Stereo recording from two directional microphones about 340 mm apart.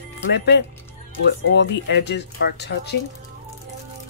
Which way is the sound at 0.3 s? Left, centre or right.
Left.